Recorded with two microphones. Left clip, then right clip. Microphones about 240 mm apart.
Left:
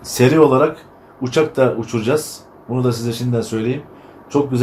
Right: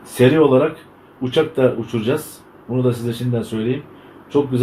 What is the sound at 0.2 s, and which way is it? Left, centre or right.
Speech, left.